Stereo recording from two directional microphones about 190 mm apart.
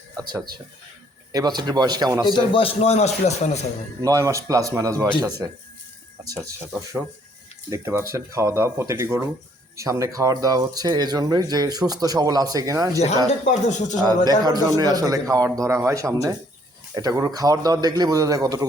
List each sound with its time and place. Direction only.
0.2 s a man's voice: 15° right (ahead or behind)
2.2 s a man's voice: 25° left (ahead or behind)
4.0 s a man's voice: 15° right (ahead or behind)
6.2 s a man's voice: 15° right (ahead or behind)
13.4 s a man's voice: 40° left (ahead or behind)
14.3 s a man's voice: 20° right (ahead or behind)